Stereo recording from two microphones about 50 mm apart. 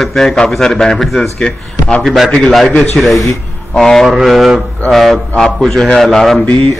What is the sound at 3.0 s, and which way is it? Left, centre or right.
A man's voice, centre.